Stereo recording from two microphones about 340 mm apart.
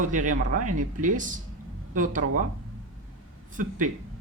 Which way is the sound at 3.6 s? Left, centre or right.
Right.